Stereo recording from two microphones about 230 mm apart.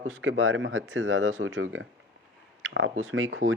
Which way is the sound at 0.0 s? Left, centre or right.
Right.